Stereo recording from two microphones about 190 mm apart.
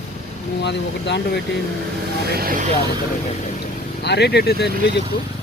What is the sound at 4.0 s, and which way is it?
Speech, 60° left (ahead or behind).